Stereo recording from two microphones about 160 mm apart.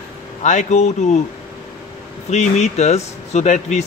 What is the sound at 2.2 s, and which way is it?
A man's voice, 45° left (ahead or behind).